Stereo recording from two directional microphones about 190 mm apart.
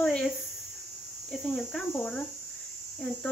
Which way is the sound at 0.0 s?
5° left (ahead or behind).